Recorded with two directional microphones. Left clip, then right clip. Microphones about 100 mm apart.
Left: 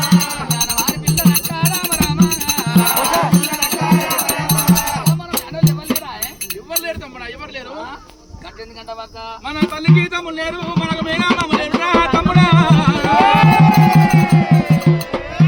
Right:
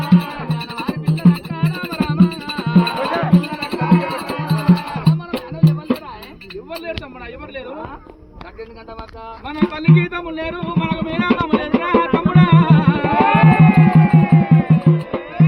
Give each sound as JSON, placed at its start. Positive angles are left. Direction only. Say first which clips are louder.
{"t": 0.0, "sound": "music", "louder": "left 3 dB", "side_deg": 15}
{"t": 9.6, "sound": "music", "louder": "left 1 dB", "side_deg": 0}